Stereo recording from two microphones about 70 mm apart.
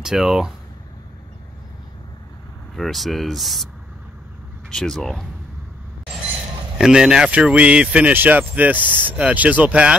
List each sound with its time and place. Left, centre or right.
0.0 s speech: centre
2.7 s speech: centre
4.6 s speech: centre
6.8 s speech: centre